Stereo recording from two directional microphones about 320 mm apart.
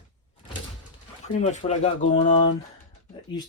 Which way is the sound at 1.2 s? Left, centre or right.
Left.